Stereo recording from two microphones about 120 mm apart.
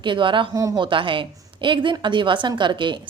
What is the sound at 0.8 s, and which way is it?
A woman's voice, 45° right (ahead or behind).